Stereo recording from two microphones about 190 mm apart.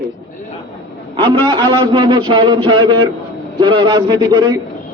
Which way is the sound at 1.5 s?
20° right (ahead or behind).